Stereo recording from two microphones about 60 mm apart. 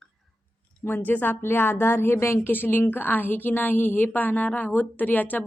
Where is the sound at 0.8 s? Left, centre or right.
Left.